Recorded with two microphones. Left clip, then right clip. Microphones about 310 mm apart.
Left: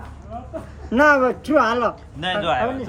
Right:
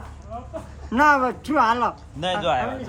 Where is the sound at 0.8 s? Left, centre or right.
Centre.